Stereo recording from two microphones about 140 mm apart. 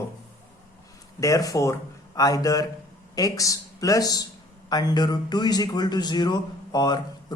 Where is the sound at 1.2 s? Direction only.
25° left (ahead or behind).